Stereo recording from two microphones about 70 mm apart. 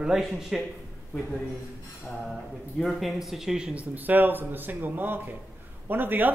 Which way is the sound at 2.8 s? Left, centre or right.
Centre.